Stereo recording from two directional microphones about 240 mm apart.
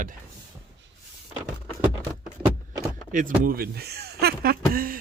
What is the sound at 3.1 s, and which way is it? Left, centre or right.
Speech, right.